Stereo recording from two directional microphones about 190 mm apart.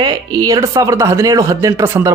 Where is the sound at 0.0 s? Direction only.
20° right (ahead or behind).